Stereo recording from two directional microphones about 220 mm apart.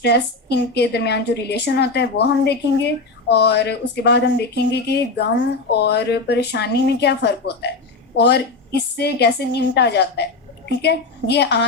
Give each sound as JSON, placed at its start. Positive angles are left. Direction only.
{"t": 0.0, "sound": "a woman's voice", "side_deg": 50}